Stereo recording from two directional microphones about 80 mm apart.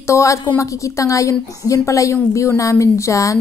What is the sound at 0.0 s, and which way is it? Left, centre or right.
A woman's voice, left.